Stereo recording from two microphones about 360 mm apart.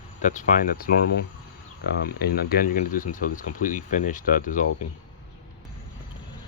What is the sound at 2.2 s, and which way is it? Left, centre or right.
Speech, left.